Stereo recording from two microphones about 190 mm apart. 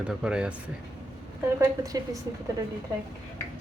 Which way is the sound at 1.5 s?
20° right (ahead or behind).